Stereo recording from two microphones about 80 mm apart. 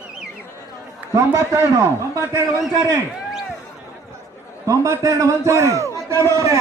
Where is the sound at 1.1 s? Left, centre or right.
Right.